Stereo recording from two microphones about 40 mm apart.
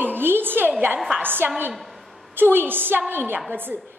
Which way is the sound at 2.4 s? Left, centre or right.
Right.